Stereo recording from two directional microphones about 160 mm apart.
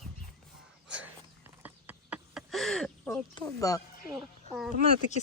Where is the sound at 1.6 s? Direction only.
10° right (ahead or behind).